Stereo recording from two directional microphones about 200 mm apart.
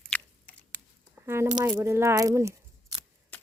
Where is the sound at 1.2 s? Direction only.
15° right (ahead or behind).